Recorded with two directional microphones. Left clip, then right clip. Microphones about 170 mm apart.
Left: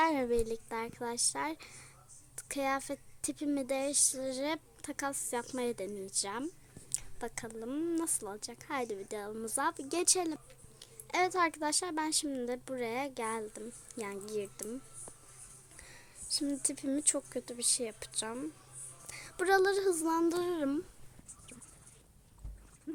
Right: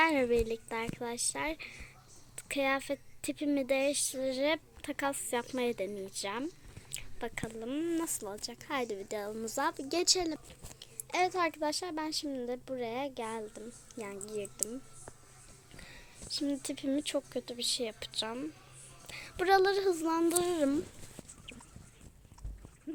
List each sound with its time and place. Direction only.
0.0 s a woman's voice: 10° left (ahead or behind)
3.9 s speech: 40° left (ahead or behind)
4.2 s a woman's voice: 5° left (ahead or behind)
16.5 s a woman's voice: 10° left (ahead or behind)
19.0 s a sound: 10° left (ahead or behind)
20.0 s speech: 5° left (ahead or behind)